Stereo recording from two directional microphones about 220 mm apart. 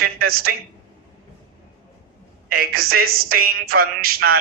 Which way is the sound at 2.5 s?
45° right (ahead or behind).